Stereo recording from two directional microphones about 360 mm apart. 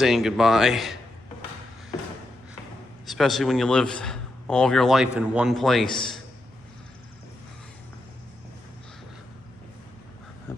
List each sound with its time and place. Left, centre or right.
0.0 s a man's voice: centre
3.1 s a man's voice: centre